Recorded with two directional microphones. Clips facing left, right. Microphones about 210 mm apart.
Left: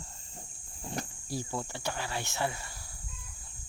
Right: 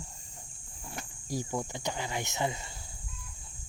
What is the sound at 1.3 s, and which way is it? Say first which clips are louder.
Speech: right 4 dB; 15° right (ahead or behind).